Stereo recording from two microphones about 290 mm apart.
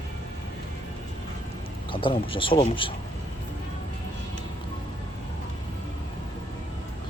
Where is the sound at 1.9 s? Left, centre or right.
Centre.